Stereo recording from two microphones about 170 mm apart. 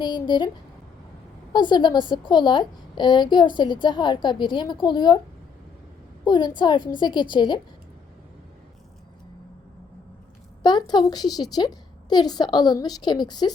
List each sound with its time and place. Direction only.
0.0 s a woman's voice: 25° left (ahead or behind)
1.5 s a woman's voice: 25° left (ahead or behind)
6.2 s a woman's voice: 25° left (ahead or behind)
10.6 s a woman's voice: 25° left (ahead or behind)